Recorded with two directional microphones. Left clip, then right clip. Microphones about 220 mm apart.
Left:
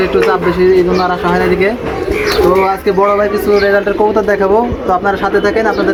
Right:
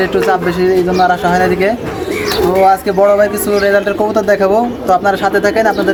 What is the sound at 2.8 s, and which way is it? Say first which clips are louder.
A man's voice: right 1 dB; 30° right (ahead or behind).